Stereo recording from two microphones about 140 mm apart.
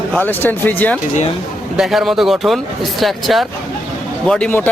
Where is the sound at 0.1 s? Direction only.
15° left (ahead or behind).